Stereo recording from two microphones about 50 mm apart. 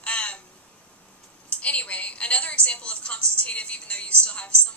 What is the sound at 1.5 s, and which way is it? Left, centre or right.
A woman's voice, left.